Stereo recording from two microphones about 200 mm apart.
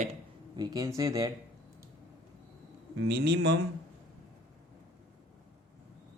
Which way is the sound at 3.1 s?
55° right (ahead or behind).